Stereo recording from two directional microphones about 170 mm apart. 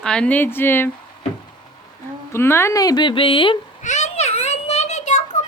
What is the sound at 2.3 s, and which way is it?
Speech, 15° left (ahead or behind).